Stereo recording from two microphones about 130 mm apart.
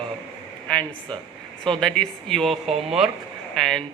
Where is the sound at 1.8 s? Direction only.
5° left (ahead or behind).